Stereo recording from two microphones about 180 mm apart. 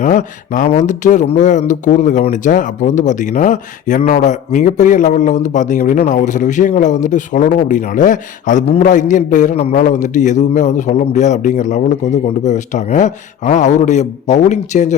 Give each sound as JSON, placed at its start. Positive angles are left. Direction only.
{"t": 0.0, "sound": "speech", "side_deg": 45}